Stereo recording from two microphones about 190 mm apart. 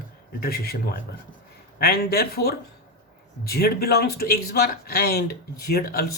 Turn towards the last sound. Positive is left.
turn(degrees=55)  # may be behind; listen again after turning